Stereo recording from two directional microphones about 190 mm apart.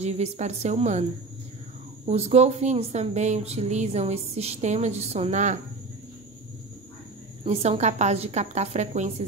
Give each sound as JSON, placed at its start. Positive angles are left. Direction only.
{"t": 0.0, "sound": "speech", "side_deg": -35}
{"t": 2.0, "sound": "speech", "side_deg": -35}
{"t": 7.4, "sound": "speech", "side_deg": -35}